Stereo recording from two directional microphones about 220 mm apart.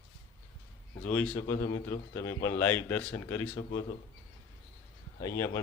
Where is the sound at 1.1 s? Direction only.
10° left (ahead or behind).